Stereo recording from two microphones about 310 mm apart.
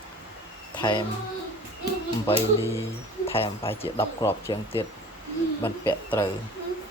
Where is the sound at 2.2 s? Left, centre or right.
Centre.